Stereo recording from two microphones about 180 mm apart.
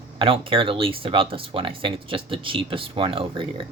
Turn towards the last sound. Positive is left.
turn(degrees=-30)  # may be behind; listen again after turning